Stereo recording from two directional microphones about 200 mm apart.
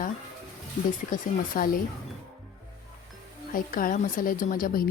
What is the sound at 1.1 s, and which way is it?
Speech, 45° left (ahead or behind).